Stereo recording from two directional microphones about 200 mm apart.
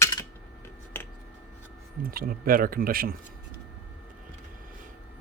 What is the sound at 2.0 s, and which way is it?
Speech, 45° right (ahead or behind).